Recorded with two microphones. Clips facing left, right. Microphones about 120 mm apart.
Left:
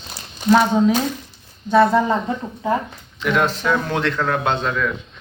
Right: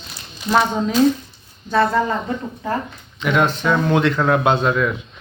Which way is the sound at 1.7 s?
15° left (ahead or behind).